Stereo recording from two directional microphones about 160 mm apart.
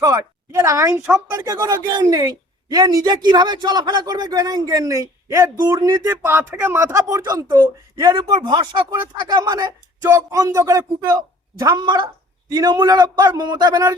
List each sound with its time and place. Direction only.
0.0 s speech: 20° right (ahead or behind)